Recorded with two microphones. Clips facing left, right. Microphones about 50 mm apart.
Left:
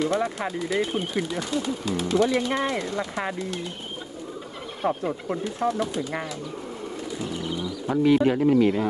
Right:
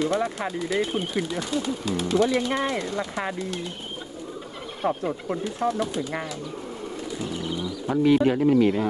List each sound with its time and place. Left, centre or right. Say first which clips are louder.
0.0 s speech: even; centre
4.8 s speech: even; centre
7.5 s bird: even; left
8.2 s speech: even; centre